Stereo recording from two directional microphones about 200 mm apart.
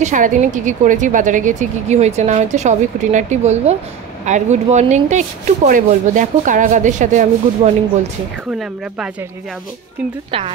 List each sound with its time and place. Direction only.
0.0 s a woman's voice: 40° right (ahead or behind)